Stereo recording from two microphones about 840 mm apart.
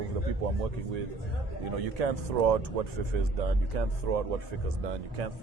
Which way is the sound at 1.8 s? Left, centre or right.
Right.